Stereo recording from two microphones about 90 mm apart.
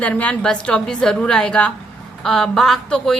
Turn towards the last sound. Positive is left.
turn(degrees=5)  # may be behind; listen again after turning